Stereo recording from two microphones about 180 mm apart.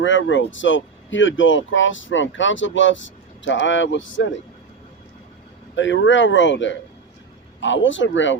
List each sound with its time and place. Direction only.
0.0 s speech: 90° left
5.7 s speech: 90° left